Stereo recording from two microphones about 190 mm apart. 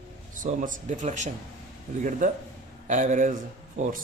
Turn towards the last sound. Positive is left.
turn(degrees=-40)  # may be behind; listen again after turning